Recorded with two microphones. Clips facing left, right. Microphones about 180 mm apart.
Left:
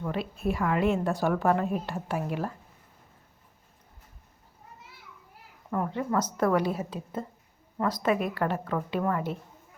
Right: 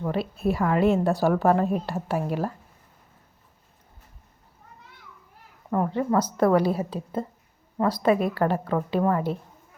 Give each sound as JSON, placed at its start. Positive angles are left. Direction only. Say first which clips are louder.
{"t": 0.0, "sound": "a woman's voice", "louder": "right 4 dB", "side_deg": -35}
{"t": 5.7, "sound": "a woman's voice", "louder": "right 5 dB", "side_deg": -35}